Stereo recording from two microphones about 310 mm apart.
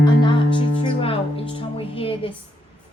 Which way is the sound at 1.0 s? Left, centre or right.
Centre.